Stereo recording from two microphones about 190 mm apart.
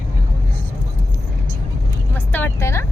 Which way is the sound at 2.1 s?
10° left (ahead or behind).